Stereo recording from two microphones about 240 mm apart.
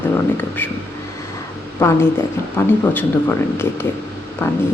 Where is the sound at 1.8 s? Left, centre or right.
Centre.